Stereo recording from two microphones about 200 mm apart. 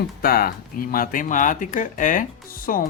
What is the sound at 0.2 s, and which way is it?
Speech, 50° left (ahead or behind).